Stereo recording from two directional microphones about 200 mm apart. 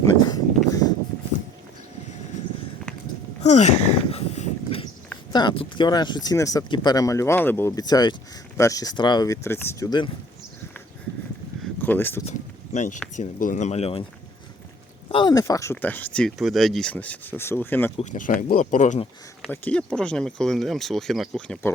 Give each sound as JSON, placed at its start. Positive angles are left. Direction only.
{"t": 3.4, "sound": "a sound", "side_deg": 35}
{"t": 5.3, "sound": "speech", "side_deg": 20}
{"t": 11.6, "sound": "a sound", "side_deg": 10}
{"t": 12.7, "sound": "speech", "side_deg": 40}
{"t": 15.1, "sound": "speech", "side_deg": 20}
{"t": 17.9, "sound": "speech", "side_deg": 40}
{"t": 19.5, "sound": "speech", "side_deg": 5}